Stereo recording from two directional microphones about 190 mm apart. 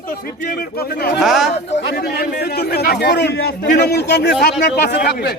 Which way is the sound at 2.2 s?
55° left (ahead or behind).